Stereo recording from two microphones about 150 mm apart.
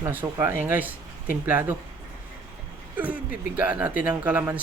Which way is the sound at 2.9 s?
10° right (ahead or behind).